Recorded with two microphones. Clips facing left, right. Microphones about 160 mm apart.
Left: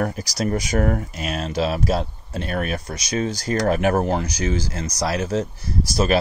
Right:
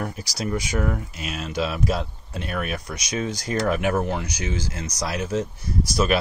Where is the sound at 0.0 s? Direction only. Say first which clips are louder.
Left 5 dB; 40° left (ahead or behind).